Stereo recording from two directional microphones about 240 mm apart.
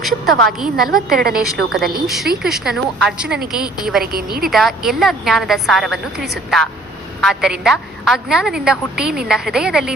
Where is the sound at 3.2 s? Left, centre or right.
Right.